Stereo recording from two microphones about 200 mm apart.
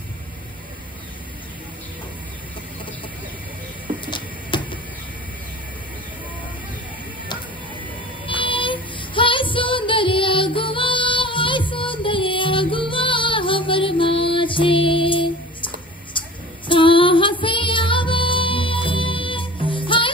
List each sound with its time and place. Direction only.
4.0 s a sound: 25° left (ahead or behind)
8.3 s music: 25° left (ahead or behind)
16.1 s female singing: 25° left (ahead or behind)